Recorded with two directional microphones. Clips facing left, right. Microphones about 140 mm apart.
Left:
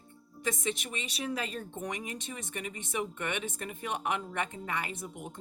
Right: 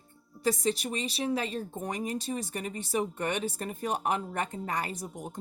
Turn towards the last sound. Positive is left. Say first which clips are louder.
# right 2 dB
turn(degrees=-40)  # may be behind; listen again after turning